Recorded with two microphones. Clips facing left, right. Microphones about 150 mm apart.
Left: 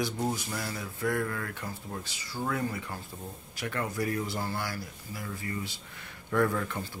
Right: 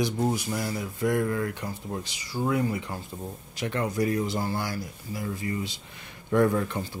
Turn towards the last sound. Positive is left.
turn(degrees=-25)  # may be behind; listen again after turning